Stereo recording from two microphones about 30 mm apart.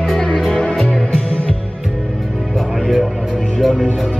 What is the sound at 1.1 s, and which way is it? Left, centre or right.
Music, left.